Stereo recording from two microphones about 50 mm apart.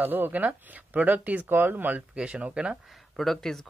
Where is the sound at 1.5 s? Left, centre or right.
Right.